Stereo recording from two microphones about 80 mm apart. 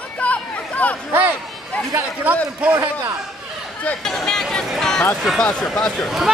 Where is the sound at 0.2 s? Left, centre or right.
Centre.